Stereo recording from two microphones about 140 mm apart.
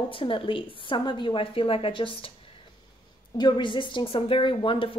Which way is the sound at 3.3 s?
30° left (ahead or behind).